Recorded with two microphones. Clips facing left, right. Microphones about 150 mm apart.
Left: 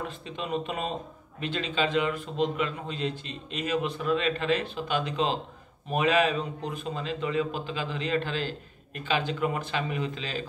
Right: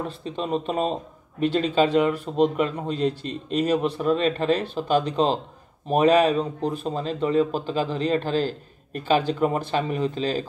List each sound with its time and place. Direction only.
0.2 s a man's voice: 35° right (ahead or behind)